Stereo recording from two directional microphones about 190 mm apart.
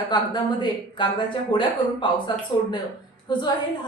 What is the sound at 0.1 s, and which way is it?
Speech, 20° left (ahead or behind).